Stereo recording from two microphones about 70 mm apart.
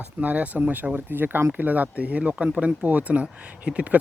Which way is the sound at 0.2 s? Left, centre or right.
Right.